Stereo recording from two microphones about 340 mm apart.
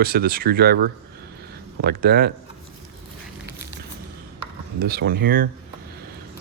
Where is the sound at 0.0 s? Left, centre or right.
Right.